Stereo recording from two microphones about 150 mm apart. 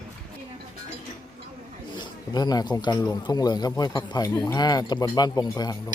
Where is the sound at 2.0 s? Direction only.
25° left (ahead or behind).